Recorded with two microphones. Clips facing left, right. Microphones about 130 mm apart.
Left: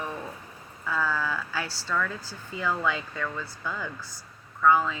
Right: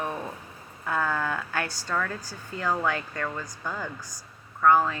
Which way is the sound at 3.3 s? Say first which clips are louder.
Even; 15° right (ahead or behind).